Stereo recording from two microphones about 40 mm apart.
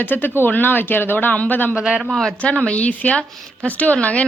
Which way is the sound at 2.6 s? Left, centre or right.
Left.